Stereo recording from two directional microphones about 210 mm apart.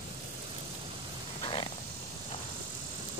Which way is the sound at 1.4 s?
25° left (ahead or behind).